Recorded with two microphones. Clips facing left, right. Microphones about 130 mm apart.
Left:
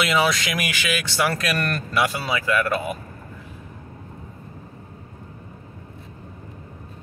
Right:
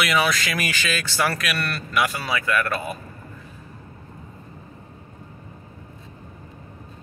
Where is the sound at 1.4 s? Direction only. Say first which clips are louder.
Left 3 dB; 45° left (ahead or behind).